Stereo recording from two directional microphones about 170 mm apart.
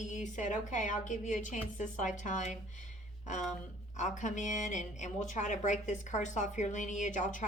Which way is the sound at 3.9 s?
45° left (ahead or behind).